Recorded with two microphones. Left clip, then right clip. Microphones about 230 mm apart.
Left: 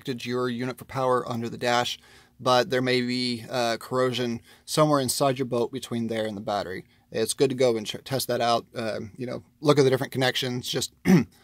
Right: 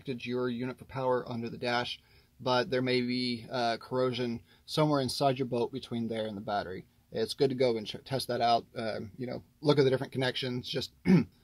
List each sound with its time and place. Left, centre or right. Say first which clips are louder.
0.0 s speech: left 5 dB; left